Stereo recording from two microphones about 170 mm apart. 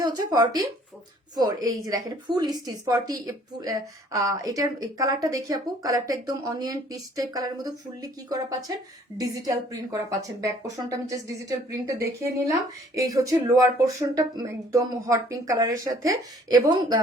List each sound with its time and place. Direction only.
0.0 s a woman's voice: 20° right (ahead or behind)